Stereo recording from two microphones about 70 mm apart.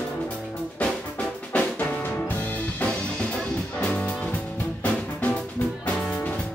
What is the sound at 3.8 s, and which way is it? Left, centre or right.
Music, centre.